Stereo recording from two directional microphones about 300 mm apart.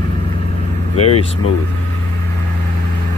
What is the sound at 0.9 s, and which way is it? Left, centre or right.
Speech, centre.